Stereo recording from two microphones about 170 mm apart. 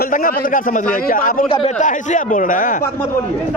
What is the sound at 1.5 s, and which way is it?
Speech, 30° left (ahead or behind).